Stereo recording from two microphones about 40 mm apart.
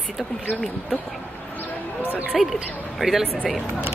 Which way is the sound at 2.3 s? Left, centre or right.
Centre.